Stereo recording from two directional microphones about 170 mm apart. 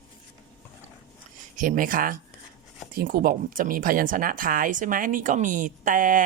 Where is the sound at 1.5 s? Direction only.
50° right (ahead or behind).